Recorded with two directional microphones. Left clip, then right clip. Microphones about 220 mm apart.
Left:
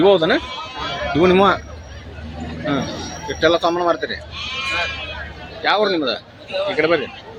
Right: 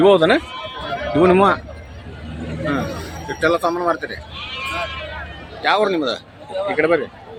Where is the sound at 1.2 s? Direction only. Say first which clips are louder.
Even; centre (ahead or behind).